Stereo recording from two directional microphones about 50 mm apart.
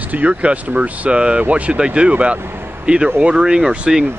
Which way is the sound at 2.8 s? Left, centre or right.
Right.